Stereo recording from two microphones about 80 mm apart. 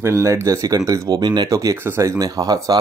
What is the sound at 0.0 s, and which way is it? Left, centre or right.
Speech, right.